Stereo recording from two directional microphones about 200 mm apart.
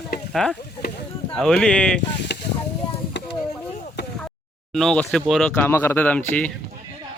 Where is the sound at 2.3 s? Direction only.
60° left (ahead or behind).